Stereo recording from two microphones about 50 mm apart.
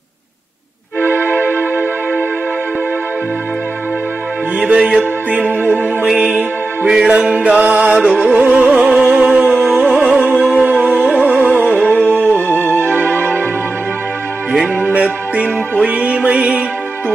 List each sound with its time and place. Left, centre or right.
1.4 s music: right
4.7 s music: centre
5.5 s music: right
6.9 s music: centre
8.0 s music: centre
8.8 s music: centre
10.5 s music: right
12.4 s music: left
14.5 s music: centre